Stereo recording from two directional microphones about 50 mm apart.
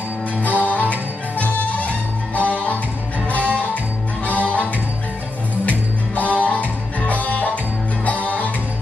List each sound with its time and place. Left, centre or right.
0.4 s music: left
5.7 s music: left